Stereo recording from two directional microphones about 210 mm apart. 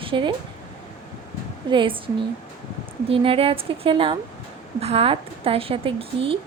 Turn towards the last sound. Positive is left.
turn(degrees=-25)  # may be behind; listen again after turning